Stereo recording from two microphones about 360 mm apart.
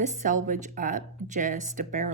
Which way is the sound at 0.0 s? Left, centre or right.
Right.